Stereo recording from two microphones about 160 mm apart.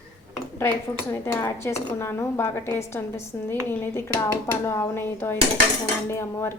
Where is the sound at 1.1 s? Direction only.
15° left (ahead or behind).